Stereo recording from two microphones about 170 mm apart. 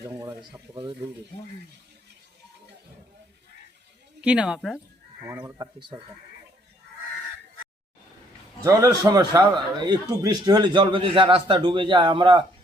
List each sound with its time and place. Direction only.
0.2 s speech: 20° right (ahead or behind)
4.2 s speech: 5° right (ahead or behind)
5.3 s speech: 15° right (ahead or behind)
8.6 s a man's voice: 20° right (ahead or behind)